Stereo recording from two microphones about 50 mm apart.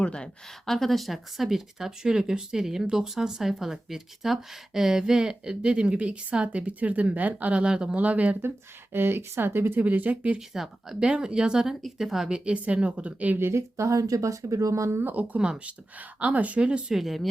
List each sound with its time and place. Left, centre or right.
0.0 s speech: centre
0.7 s speech: centre
7.9 s a woman's voice: right
8.4 s speech: right
9.8 s speech: right
10.5 s speech: centre
12.5 s a woman's voice: right
13.4 s speech: right
15.0 s speech: right
15.4 s a woman's voice: centre
16.2 s a woman's voice: right
16.9 s speech: centre